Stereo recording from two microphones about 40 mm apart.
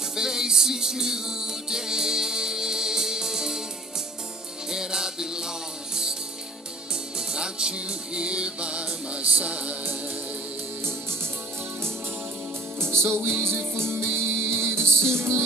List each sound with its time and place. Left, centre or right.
0.1 s music: centre
4.6 s music: centre
7.2 s music: centre
12.8 s music: right